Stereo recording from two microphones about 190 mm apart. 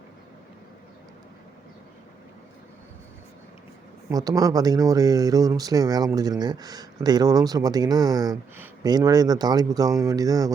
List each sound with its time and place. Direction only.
4.1 s speech: 20° right (ahead or behind)